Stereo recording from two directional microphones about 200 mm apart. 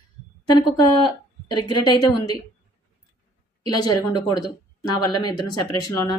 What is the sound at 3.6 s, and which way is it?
Speech, 20° left (ahead or behind).